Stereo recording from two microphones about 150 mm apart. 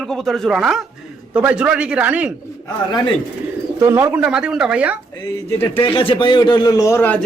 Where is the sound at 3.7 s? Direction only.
15° right (ahead or behind).